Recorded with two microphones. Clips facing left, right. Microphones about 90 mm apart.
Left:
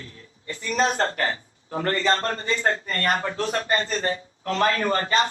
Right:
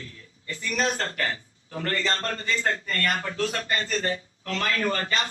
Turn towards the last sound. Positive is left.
turn(degrees=35)  # may be behind; listen again after turning